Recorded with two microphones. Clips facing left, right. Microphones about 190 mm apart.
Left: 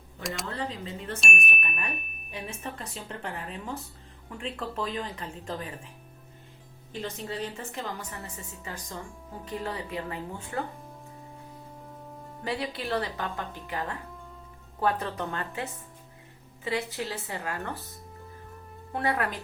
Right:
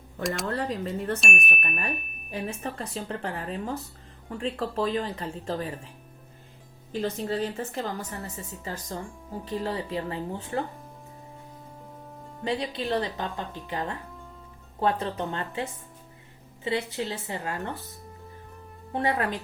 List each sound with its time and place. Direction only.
0.2 s speech: centre (ahead or behind)
0.4 s speech: 60° right (ahead or behind)
1.2 s speech: centre (ahead or behind)
1.6 s speech: 40° right (ahead or behind)
7.0 s speech: 35° right (ahead or behind)
8.4 s a woman's voice: 25° right (ahead or behind)
12.5 s a woman's voice: 20° right (ahead or behind)
16.6 s a woman's voice: 25° right (ahead or behind)
18.9 s a woman's voice: 25° right (ahead or behind)